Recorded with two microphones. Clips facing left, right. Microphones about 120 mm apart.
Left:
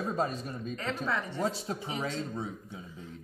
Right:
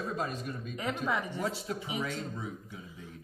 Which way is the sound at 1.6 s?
30° left (ahead or behind).